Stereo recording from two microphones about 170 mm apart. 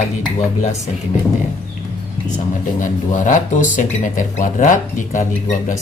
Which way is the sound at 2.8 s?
50° left (ahead or behind).